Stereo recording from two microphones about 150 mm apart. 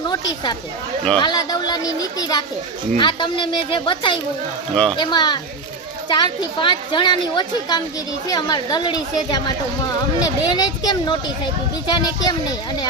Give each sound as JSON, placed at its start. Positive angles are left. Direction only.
{"t": 0.1, "sound": "a woman's voice", "side_deg": 30}
{"t": 4.7, "sound": "speech", "side_deg": 5}
{"t": 4.9, "sound": "a woman's voice", "side_deg": 30}